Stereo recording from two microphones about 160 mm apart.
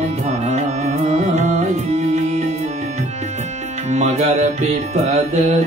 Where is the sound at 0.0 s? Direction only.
45° right (ahead or behind).